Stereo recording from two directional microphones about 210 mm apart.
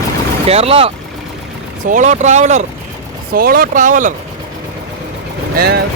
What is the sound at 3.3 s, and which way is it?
Speech, 45° right (ahead or behind).